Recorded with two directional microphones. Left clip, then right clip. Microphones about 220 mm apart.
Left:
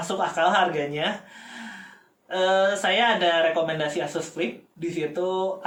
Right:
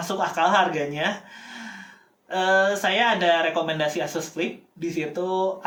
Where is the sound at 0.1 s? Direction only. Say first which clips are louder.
Right 1 dB; 20° right (ahead or behind).